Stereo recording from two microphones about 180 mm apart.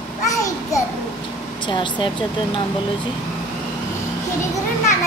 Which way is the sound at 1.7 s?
25° left (ahead or behind).